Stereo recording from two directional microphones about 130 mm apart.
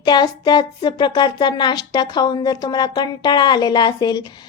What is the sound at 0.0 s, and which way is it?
Speech, 35° left (ahead or behind).